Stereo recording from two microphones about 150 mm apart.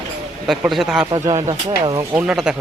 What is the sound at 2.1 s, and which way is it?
Speech, 5° right (ahead or behind).